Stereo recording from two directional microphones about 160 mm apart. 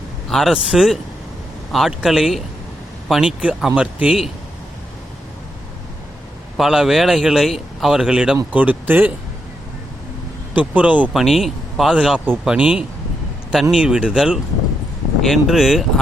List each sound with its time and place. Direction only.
0.3 s speech: centre (ahead or behind)
6.6 s speech: centre (ahead or behind)
10.5 s speech: 10° right (ahead or behind)